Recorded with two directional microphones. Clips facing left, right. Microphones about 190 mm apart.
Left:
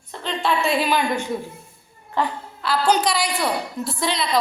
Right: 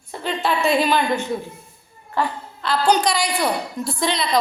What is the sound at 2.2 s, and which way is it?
Speech, 20° left (ahead or behind).